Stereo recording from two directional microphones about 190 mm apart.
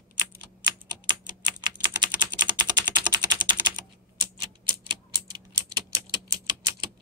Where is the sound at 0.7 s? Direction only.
20° right (ahead or behind).